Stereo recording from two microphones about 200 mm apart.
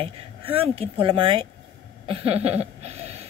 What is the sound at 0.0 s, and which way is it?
Speech, 30° right (ahead or behind).